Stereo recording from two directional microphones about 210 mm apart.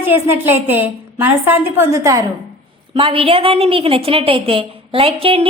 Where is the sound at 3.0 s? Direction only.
25° right (ahead or behind).